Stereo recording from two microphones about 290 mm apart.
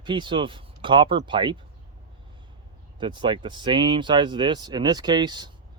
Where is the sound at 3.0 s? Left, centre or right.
Centre.